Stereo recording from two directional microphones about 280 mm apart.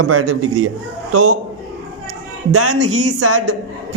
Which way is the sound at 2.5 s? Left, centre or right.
Right.